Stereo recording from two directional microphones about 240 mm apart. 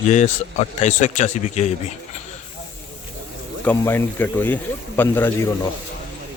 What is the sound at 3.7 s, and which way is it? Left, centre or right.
Speech, centre.